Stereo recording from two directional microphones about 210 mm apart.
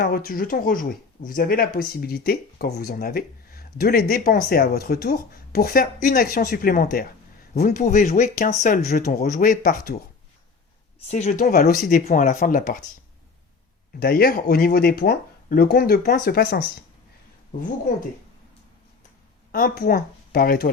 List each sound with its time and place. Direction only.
0.0 s speech: 45° left (ahead or behind)
11.1 s speech: 35° left (ahead or behind)
14.0 s speech: 45° left (ahead or behind)
19.5 s speech: 45° left (ahead or behind)